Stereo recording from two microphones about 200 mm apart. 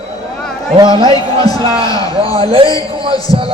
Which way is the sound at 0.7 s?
20° right (ahead or behind).